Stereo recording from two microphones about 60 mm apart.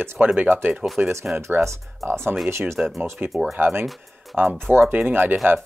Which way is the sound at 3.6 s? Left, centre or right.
Right.